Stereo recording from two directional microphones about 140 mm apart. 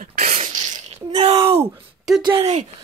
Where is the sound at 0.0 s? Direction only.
80° right.